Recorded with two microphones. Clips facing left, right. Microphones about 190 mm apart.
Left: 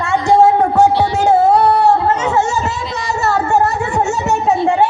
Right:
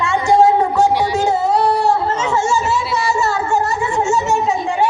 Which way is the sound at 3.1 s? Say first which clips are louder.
Left 7 dB; 60° left (ahead or behind).